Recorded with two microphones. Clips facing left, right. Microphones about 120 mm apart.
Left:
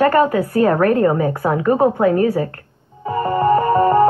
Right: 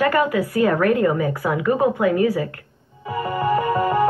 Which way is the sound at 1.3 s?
35° left (ahead or behind).